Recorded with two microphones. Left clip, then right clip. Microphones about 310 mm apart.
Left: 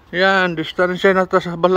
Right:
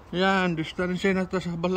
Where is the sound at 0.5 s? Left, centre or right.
Left.